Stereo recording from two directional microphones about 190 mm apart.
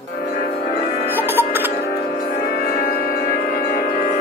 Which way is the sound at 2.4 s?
50° left (ahead or behind).